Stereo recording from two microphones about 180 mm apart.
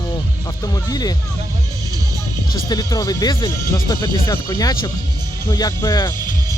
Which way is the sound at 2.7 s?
20° left (ahead or behind).